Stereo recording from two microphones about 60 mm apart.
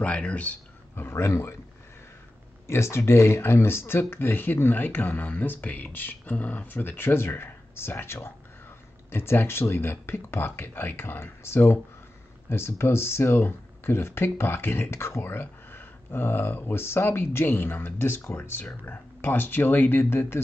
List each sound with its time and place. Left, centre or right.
0.0 s speech: left
0.9 s speech: left
2.6 s speech: left